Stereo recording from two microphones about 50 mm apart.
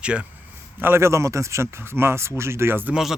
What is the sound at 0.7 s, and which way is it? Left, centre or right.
Speech, right.